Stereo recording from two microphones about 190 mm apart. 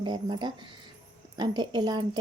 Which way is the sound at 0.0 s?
25° right (ahead or behind).